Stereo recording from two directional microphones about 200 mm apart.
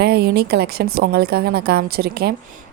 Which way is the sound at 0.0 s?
50° right (ahead or behind).